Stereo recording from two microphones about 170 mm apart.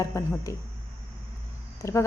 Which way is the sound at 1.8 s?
15° left (ahead or behind).